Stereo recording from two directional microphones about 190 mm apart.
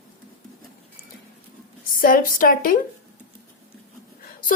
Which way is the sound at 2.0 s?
45° left (ahead or behind).